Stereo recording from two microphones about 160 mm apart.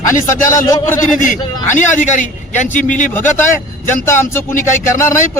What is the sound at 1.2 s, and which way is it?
A man's voice, 55° left (ahead or behind).